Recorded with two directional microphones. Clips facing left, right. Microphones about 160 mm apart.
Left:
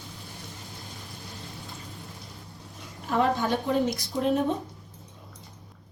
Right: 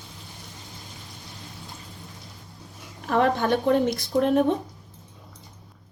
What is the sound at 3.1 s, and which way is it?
A woman's voice, 60° right (ahead or behind).